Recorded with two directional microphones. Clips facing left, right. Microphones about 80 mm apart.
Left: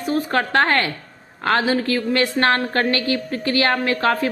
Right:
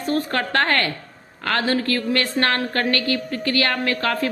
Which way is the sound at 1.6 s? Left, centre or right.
Centre.